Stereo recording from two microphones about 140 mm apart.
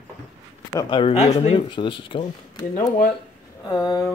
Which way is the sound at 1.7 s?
35° left (ahead or behind).